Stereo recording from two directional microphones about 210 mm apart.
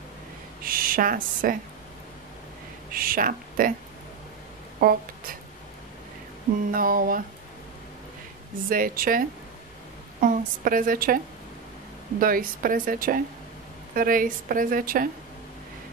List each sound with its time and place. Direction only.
0.6 s a woman's voice: 40° right (ahead or behind)
2.9 s speech: 45° right (ahead or behind)
4.7 s speech: 45° right (ahead or behind)
6.7 s a sound: 45° right (ahead or behind)
8.6 s a woman's voice: 40° right (ahead or behind)
10.2 s a woman's voice: 40° right (ahead or behind)
12.2 s a woman's voice: 45° right (ahead or behind)